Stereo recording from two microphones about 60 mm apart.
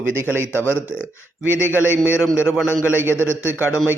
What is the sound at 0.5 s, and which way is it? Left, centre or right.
A man's voice, left.